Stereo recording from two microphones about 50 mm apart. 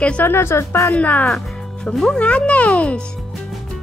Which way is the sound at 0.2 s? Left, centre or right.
Left.